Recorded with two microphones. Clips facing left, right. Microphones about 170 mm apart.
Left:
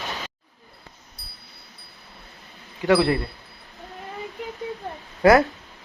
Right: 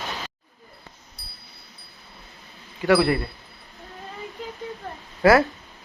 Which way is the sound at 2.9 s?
20° left (ahead or behind).